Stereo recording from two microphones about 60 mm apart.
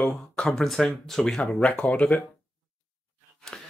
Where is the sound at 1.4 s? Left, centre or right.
Left.